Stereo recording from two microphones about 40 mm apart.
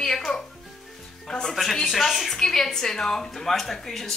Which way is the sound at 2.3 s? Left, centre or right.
Centre.